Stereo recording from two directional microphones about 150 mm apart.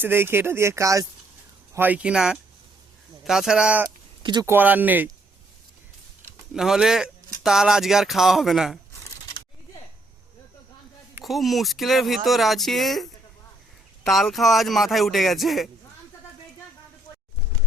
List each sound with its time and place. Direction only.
0.0 s speech: 15° right (ahead or behind)
4.2 s speech: 30° right (ahead or behind)
4.4 s speech: 10° right (ahead or behind)
6.5 s speech: 5° right (ahead or behind)
11.2 s speech: centre (ahead or behind)